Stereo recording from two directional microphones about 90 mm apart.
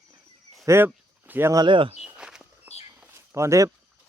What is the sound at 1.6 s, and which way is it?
Speech, 70° right (ahead or behind).